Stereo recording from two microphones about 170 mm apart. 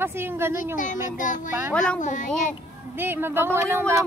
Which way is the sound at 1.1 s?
50° left (ahead or behind).